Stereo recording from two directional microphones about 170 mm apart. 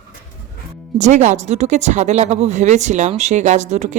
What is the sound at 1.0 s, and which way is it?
Speech, 45° right (ahead or behind).